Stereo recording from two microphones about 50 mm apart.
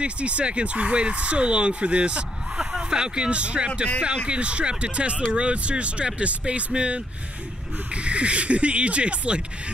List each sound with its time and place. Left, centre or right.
0.0 s speech: right